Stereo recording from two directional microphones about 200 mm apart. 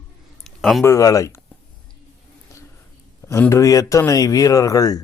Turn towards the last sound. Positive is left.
turn(degrees=20)  # may be behind; listen again after turning